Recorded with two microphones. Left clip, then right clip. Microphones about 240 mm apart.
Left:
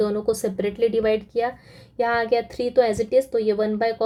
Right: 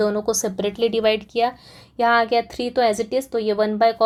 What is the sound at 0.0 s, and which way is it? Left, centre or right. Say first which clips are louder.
A woman's voice: right 1 dB; centre.